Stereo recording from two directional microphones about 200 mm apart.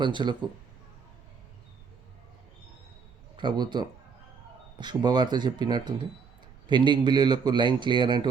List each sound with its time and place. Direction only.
0.0 s a man's voice: 25° right (ahead or behind)
3.3 s a man's voice: 20° right (ahead or behind)